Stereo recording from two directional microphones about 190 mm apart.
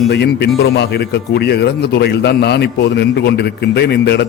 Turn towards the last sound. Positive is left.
turn(degrees=60)  # may be behind; listen again after turning